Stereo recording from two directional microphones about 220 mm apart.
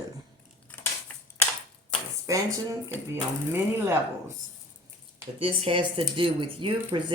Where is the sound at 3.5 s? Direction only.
10° right (ahead or behind).